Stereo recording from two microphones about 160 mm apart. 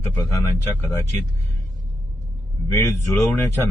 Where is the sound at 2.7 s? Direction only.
15° left (ahead or behind).